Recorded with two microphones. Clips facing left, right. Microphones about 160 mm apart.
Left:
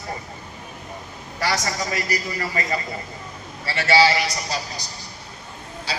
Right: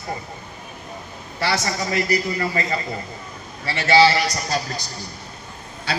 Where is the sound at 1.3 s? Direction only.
30° right (ahead or behind).